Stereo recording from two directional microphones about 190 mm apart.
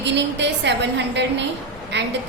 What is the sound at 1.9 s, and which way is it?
Speech, 65° right (ahead or behind).